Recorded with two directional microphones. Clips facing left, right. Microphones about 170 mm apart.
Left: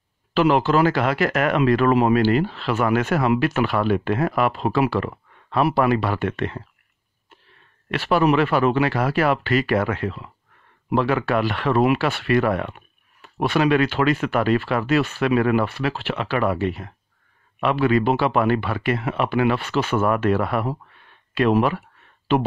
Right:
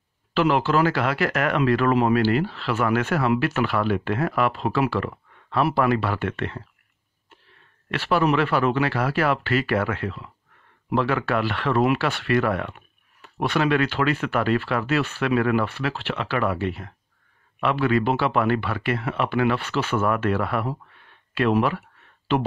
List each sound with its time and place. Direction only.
0.3 s speech: 15° left (ahead or behind)
7.9 s speech: 15° left (ahead or behind)